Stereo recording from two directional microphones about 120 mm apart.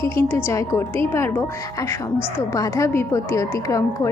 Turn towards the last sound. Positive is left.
turn(degrees=25)  # may be behind; listen again after turning